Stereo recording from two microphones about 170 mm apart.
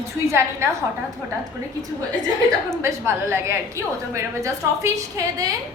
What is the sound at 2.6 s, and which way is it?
A woman's voice, 15° right (ahead or behind).